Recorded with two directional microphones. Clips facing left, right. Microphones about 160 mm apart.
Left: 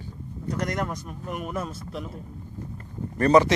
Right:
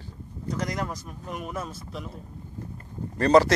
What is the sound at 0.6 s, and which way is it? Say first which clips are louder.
Speech: left 2 dB; centre (ahead or behind).